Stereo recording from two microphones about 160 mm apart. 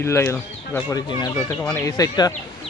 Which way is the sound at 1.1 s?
25° left (ahead or behind).